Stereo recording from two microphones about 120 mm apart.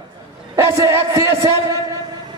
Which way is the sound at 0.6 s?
25° right (ahead or behind).